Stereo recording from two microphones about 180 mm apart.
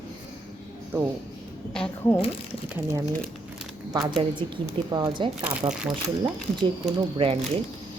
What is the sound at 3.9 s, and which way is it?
A woman's voice, 25° right (ahead or behind).